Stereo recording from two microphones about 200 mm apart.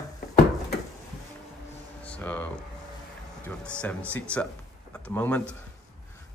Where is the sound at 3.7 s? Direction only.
5° left (ahead or behind).